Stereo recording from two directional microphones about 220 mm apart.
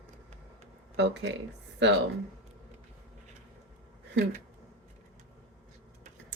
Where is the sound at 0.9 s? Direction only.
50° right (ahead or behind).